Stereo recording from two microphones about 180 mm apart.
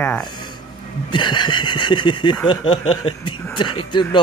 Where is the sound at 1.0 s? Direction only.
25° left (ahead or behind).